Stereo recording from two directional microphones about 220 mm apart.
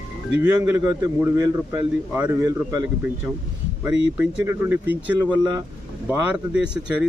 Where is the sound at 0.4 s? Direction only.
10° right (ahead or behind).